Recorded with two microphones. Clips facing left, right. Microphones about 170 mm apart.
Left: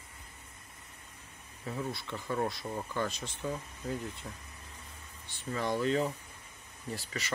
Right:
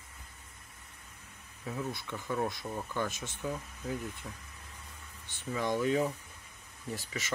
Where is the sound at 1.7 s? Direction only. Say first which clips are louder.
Even; 5° right (ahead or behind).